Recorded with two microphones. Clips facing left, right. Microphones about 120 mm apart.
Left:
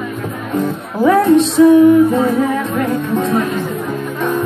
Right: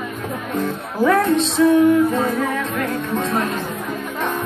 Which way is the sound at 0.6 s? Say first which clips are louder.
Left 4 dB; 15° left (ahead or behind).